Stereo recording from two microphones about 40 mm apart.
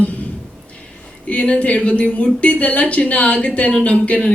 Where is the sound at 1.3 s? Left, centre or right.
Left.